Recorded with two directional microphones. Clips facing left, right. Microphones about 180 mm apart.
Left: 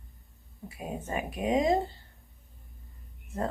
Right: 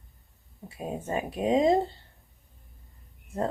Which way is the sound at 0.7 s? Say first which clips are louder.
Right 3 dB; 30° right (ahead or behind).